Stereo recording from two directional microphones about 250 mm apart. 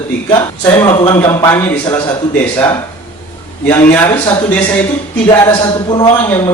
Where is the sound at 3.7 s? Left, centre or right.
Centre.